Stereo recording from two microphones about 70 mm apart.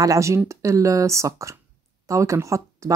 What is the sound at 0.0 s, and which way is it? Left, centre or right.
Speech, right.